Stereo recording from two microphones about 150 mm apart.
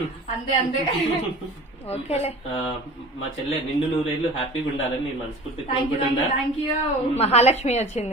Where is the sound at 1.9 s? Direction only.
45° left (ahead or behind).